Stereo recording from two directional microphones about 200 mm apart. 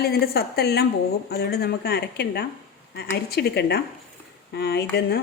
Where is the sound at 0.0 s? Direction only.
50° left (ahead or behind).